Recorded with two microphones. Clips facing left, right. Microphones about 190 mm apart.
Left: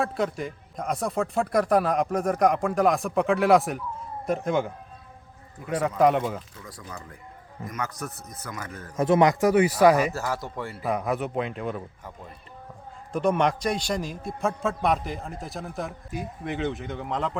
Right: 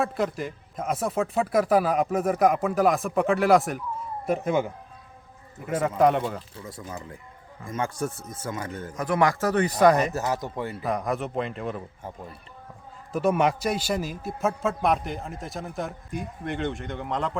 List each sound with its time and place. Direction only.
0.0 s a man's voice: centre (ahead or behind)
6.6 s speech: 25° right (ahead or behind)
9.0 s speech: 25° left (ahead or behind); by 10.1 s 5° left (ahead or behind)
10.1 s speech: 20° right (ahead or behind)
10.8 s a man's voice: 5° left (ahead or behind)
13.1 s a man's voice: 5° right (ahead or behind)